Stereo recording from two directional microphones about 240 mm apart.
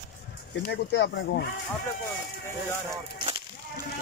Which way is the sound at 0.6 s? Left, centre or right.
Left.